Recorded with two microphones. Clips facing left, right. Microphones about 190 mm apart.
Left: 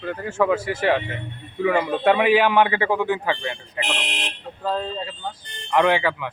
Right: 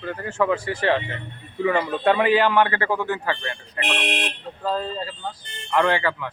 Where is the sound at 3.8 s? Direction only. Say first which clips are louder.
Right 3 dB; 60° right (ahead or behind).